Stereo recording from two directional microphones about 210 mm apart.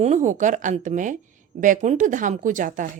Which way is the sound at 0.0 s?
35° right (ahead or behind).